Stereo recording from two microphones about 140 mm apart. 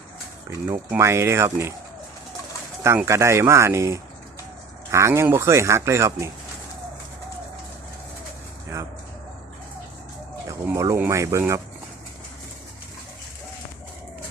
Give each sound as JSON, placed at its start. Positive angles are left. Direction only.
{"t": 0.7, "sound": "speech", "side_deg": -20}
{"t": 2.8, "sound": "speech", "side_deg": -20}
{"t": 10.5, "sound": "speech", "side_deg": -25}